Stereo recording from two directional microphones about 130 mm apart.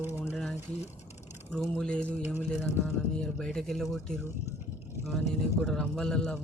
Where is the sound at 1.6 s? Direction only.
5° left (ahead or behind).